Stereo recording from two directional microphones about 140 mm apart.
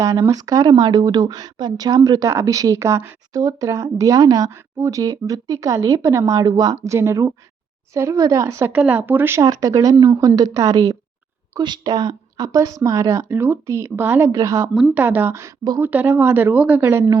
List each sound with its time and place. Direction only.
0.0 s speech: 25° right (ahead or behind)
9.4 s speech: 25° right (ahead or behind)
14.8 s speech: 10° right (ahead or behind)
15.8 s speech: 15° right (ahead or behind)